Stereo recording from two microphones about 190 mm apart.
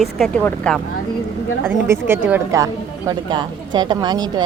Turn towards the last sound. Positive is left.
turn(degrees=-20)  # may be behind; listen again after turning